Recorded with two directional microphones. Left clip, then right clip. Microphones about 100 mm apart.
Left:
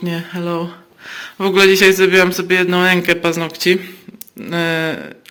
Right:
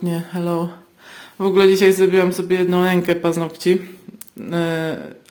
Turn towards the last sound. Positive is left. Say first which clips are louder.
# left 4 dB
turn(degrees=-20)  # may be behind; listen again after turning